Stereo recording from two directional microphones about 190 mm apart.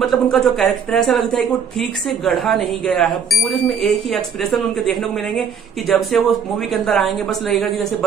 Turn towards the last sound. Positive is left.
turn(degrees=0)  # may be behind; listen again after turning